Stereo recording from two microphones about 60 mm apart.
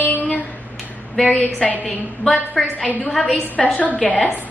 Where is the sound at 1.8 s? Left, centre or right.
Left.